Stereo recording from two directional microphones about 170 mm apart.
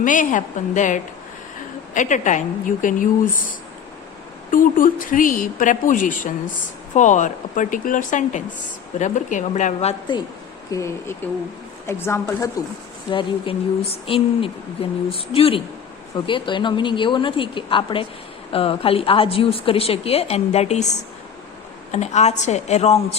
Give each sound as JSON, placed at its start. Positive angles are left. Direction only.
{"t": 0.0, "sound": "speech", "side_deg": 50}
{"t": 4.5, "sound": "speech", "side_deg": 50}
{"t": 10.7, "sound": "a woman's voice", "side_deg": 15}
{"t": 13.1, "sound": "speech", "side_deg": 30}
{"t": 21.9, "sound": "speech", "side_deg": 40}